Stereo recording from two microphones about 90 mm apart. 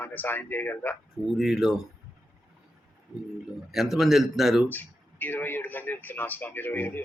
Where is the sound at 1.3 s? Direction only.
Centre (ahead or behind).